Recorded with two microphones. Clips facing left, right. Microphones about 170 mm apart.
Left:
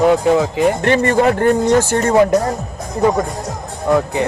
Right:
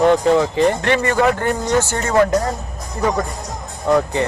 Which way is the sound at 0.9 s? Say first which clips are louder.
Left 3 dB; 35° left (ahead or behind).